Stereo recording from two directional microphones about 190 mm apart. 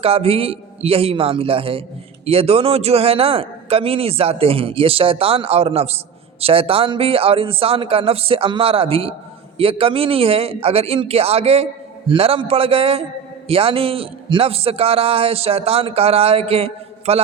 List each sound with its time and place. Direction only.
0.0 s a man's voice: 30° right (ahead or behind)